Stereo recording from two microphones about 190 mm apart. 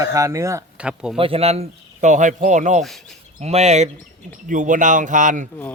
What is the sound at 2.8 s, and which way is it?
Speech, centre (ahead or behind).